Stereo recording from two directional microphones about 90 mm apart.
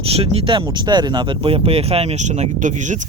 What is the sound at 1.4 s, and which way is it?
Speech, 90° right.